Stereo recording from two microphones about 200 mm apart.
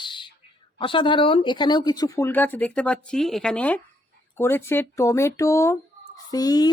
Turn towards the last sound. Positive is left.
turn(degrees=20)  # may be behind; listen again after turning